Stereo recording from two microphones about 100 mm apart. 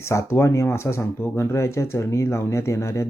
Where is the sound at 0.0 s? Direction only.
25° left (ahead or behind).